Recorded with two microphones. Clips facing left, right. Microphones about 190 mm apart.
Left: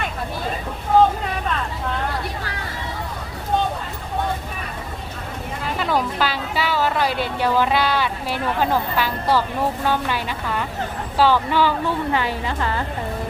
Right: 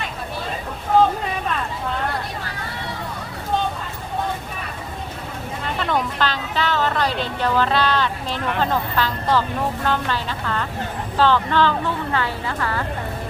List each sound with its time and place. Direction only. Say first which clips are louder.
5.6 s a woman's voice: left 1 dB; 5° left (ahead or behind)